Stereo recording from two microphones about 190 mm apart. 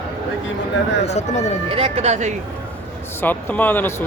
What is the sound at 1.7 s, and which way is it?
Speech, 35° right (ahead or behind).